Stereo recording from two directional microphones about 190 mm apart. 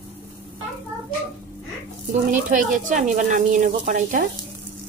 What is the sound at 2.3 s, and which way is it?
Speech, 45° right (ahead or behind).